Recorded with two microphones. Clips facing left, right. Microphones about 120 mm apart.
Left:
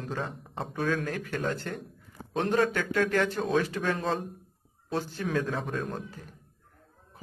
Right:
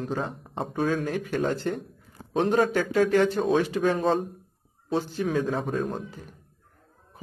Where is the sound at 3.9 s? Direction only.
Centre (ahead or behind).